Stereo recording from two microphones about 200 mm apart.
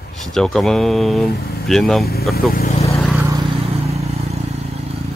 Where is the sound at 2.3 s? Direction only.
50° left (ahead or behind).